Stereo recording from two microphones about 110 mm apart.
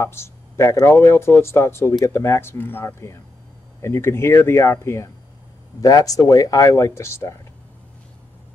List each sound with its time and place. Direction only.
0.0 s speech: 25° left (ahead or behind)
5.8 s speech: 35° left (ahead or behind)